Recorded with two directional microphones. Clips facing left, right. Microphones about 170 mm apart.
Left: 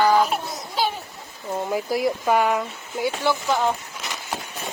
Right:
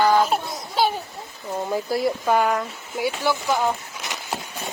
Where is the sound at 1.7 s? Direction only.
15° left (ahead or behind).